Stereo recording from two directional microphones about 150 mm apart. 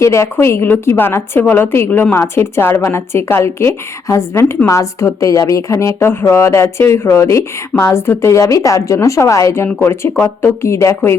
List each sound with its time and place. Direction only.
0.0 s a woman's voice: 20° left (ahead or behind)